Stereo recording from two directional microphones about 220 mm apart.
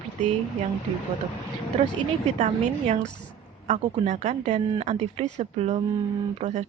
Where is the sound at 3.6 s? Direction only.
35° right (ahead or behind).